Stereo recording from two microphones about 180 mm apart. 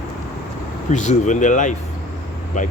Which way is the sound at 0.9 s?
40° left (ahead or behind).